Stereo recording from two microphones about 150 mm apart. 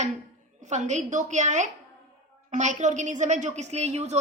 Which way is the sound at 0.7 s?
50° right (ahead or behind).